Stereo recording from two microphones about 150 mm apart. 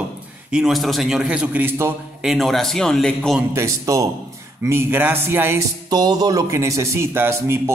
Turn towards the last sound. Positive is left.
turn(degrees=-15)  # may be behind; listen again after turning